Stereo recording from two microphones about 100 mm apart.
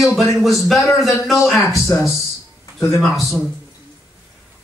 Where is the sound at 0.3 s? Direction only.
Centre (ahead or behind).